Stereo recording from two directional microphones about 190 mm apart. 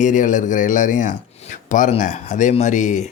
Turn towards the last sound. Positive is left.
turn(degrees=40)  # may be behind; listen again after turning